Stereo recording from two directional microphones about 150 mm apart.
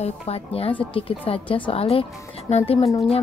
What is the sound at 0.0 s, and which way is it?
Speech, 40° left (ahead or behind).